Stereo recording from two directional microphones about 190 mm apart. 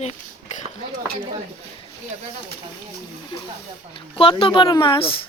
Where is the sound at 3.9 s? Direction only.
30° left (ahead or behind).